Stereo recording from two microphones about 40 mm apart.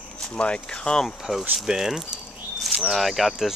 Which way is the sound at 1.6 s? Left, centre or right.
Centre.